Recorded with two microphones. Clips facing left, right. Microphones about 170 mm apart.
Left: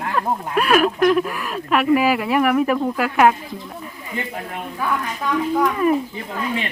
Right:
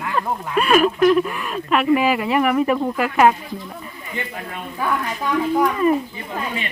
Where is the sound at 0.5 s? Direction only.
Centre (ahead or behind).